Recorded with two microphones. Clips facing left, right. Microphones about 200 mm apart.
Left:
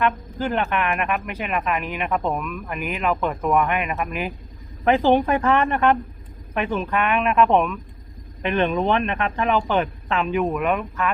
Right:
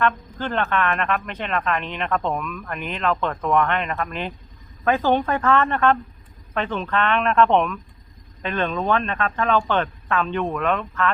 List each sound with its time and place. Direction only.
0.0 s speech: 10° left (ahead or behind)
8.4 s speech: 15° left (ahead or behind)